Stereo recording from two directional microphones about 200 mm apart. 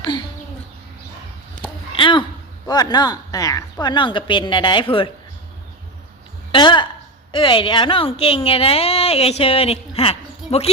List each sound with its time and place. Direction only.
1.6 s a sound: 25° left (ahead or behind)
2.6 s a woman's voice: 20° left (ahead or behind)
6.5 s a woman's voice: 25° left (ahead or behind)